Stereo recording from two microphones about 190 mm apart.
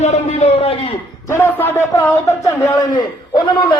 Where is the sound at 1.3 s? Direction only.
10° left (ahead or behind).